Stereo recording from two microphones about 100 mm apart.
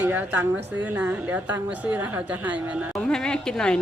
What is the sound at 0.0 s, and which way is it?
A woman's voice, 15° right (ahead or behind).